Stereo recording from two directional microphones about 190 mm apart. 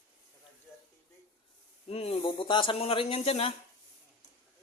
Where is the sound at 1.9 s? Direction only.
30° left (ahead or behind).